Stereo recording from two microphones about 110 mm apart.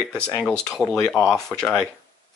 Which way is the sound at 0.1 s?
10° left (ahead or behind).